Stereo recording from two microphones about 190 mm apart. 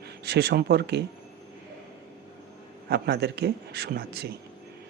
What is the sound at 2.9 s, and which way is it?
Speech, 60° right (ahead or behind).